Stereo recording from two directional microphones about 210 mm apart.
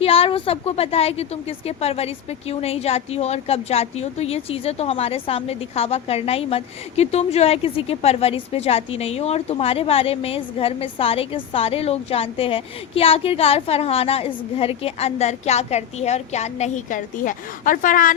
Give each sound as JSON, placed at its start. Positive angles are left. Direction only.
{"t": 0.0, "sound": "a woman's voice", "side_deg": 25}